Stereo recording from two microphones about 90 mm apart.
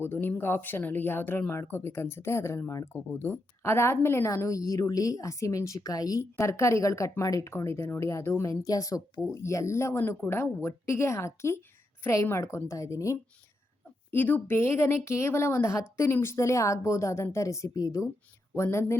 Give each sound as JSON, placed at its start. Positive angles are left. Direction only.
{"t": 0.0, "sound": "a woman's voice", "side_deg": 25}
{"t": 14.1, "sound": "a woman's voice", "side_deg": 20}